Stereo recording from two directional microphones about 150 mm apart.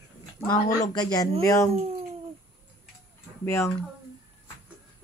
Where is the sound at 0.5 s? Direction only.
25° left (ahead or behind).